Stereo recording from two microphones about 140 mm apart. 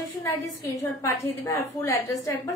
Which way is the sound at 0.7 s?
20° left (ahead or behind).